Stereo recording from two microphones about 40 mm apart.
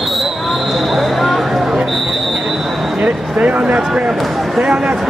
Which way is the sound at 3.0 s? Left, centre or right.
Right.